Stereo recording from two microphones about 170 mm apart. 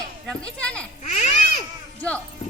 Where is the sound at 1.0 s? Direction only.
40° left (ahead or behind).